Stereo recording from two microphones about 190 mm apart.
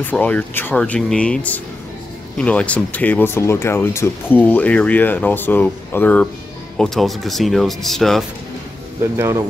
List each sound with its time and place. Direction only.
0.0 s speech: 10° left (ahead or behind)